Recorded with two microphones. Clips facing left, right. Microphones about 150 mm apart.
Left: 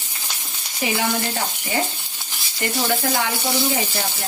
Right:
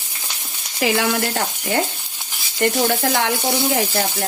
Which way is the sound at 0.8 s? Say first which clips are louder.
Right 4 dB; 85° right.